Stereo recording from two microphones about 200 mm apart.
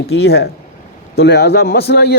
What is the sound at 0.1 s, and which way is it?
A man's voice, 55° left (ahead or behind).